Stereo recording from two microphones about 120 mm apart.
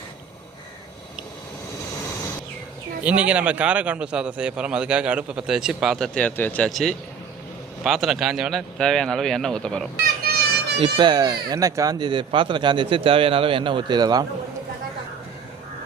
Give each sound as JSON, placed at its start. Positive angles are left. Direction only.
{"t": 3.0, "sound": "a man's voice", "side_deg": -10}
{"t": 6.1, "sound": "speech", "side_deg": 15}
{"t": 6.7, "sound": "a man's voice", "side_deg": 0}
{"t": 10.8, "sound": "speech", "side_deg": -45}